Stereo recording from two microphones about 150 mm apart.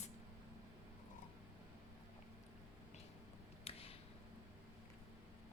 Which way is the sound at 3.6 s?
40° left (ahead or behind).